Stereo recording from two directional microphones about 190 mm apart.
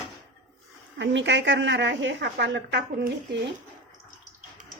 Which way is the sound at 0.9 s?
70° right (ahead or behind).